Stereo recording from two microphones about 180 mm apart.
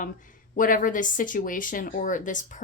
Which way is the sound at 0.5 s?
50° left (ahead or behind).